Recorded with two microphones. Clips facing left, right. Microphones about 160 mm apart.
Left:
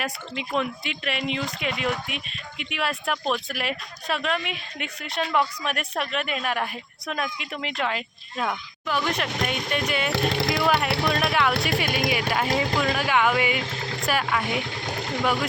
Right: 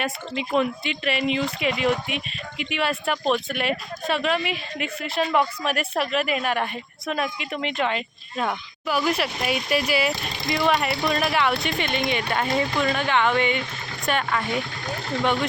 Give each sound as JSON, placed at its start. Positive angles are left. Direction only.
{"t": 0.0, "sound": "speech", "side_deg": 0}
{"t": 10.1, "sound": "speech", "side_deg": 70}
{"t": 11.1, "sound": "speech", "side_deg": 0}